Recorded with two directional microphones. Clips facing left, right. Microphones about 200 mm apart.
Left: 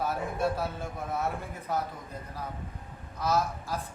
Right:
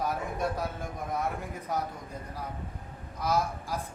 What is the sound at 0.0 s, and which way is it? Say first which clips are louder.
A man's voice: left 1 dB; 15° right (ahead or behind).